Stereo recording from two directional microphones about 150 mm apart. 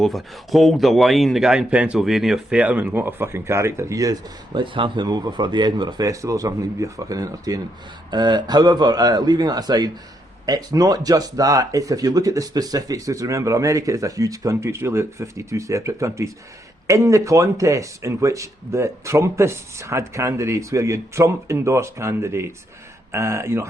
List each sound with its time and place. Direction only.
0.0 s speech: centre (ahead or behind); by 23.6 s 15° right (ahead or behind)